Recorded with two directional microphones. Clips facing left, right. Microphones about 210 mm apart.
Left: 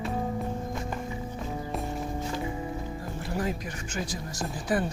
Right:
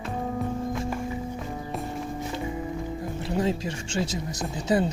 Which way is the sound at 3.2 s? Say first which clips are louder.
Right 5 dB; 25° right (ahead or behind).